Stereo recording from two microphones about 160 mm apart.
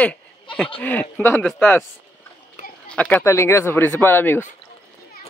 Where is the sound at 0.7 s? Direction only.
10° left (ahead or behind).